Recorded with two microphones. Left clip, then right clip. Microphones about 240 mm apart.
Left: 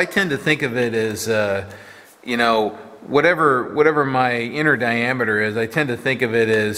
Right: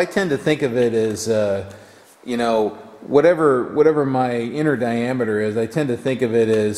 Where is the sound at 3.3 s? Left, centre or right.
Centre.